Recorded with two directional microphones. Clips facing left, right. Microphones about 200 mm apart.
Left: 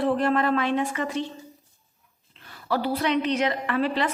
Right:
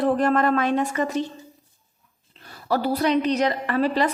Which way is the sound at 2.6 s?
40° right (ahead or behind).